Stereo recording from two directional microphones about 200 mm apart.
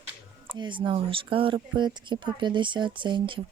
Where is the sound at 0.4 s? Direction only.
25° right (ahead or behind).